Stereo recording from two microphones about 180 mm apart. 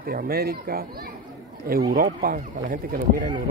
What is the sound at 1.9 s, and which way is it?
Speech, 55° right (ahead or behind).